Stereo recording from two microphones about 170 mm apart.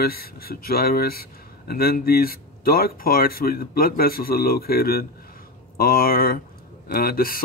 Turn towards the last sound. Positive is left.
turn(degrees=60)  # may be behind; listen again after turning